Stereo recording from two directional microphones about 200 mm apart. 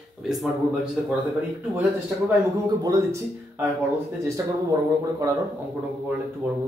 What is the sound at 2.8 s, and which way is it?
Speech, 15° right (ahead or behind).